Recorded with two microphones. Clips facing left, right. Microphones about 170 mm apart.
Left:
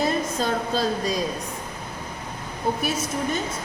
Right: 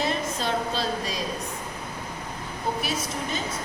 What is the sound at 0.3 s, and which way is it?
Speech, 45° left (ahead or behind).